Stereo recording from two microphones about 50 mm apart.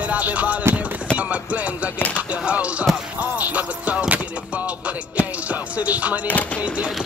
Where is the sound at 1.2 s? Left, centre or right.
Right.